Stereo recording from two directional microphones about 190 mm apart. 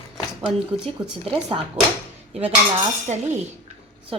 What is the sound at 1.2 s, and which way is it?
Speech, 30° right (ahead or behind).